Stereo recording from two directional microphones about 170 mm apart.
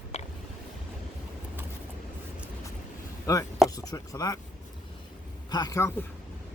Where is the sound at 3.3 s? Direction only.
20° left (ahead or behind).